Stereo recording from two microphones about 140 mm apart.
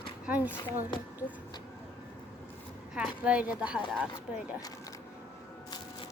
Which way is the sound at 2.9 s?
5° right (ahead or behind).